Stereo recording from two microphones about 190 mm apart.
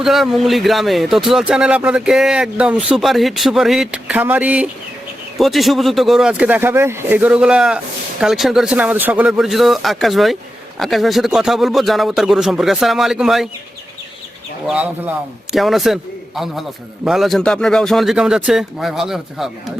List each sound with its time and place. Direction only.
0.0 s speech: centre (ahead or behind)
14.7 s speech: 5° right (ahead or behind)